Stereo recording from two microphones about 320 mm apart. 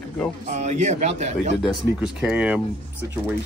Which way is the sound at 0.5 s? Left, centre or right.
Right.